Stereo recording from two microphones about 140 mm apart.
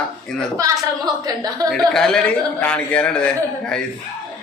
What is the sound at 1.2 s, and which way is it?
Speech, 30° right (ahead or behind).